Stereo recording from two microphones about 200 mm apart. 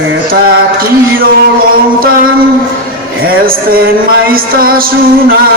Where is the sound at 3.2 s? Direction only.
45° right (ahead or behind).